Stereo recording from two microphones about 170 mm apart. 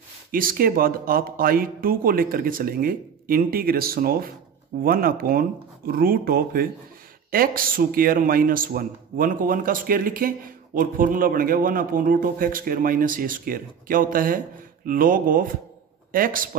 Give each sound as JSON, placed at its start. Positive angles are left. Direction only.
{"t": 0.3, "sound": "a man's voice", "side_deg": -55}